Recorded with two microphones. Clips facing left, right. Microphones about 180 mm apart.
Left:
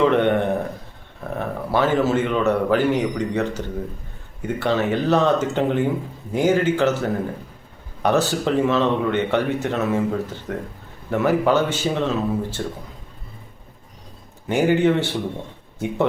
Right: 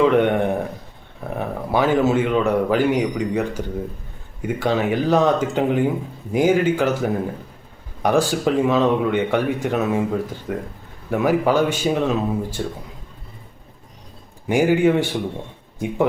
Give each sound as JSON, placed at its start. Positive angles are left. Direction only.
{"t": 0.0, "sound": "a man's voice", "side_deg": -10}
{"t": 14.4, "sound": "speech", "side_deg": -10}